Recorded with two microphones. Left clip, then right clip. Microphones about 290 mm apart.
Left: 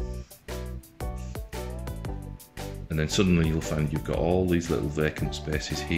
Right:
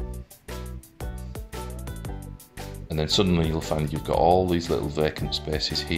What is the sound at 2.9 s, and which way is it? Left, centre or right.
Speech, centre.